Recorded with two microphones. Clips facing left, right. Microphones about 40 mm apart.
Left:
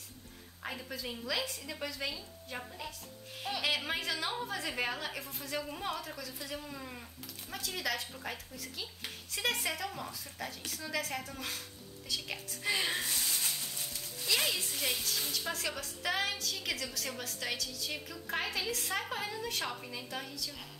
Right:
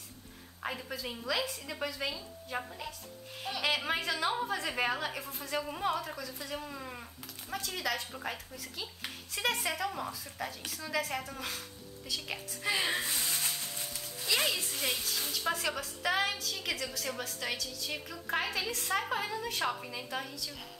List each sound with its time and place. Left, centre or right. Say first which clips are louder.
0.6 s a woman's voice: right 3 dB; centre
8.1 s a woman's voice: right 3 dB; centre
14.2 s a woman's voice: right 1 dB; centre